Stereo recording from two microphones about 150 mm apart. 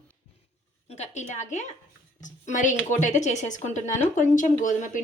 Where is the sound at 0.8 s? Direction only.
50° left (ahead or behind).